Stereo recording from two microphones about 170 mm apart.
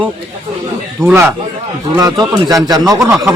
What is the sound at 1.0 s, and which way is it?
A man's voice, 10° right (ahead or behind).